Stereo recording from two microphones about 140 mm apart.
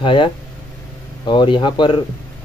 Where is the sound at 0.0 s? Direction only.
35° left (ahead or behind).